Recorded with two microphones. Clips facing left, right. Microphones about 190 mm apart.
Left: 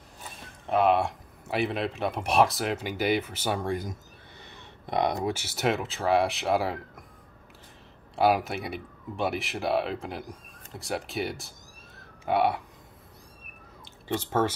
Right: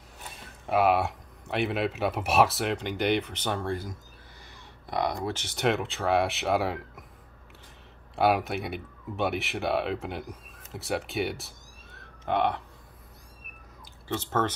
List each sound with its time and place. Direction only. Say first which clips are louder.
0.7 s speech: left 1 dB; 5° right (ahead or behind); by 5.3 s 20° left (ahead or behind)
5.3 s speech: even; 5° left (ahead or behind)
8.2 s speech: left 1 dB; centre (ahead or behind)
13.8 s speech: left 2 dB; 15° left (ahead or behind)